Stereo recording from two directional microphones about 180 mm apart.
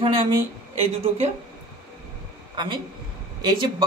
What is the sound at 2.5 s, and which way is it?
Speech, 25° right (ahead or behind).